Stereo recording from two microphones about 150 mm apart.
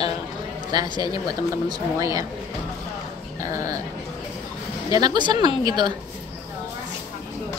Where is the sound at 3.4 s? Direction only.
20° right (ahead or behind).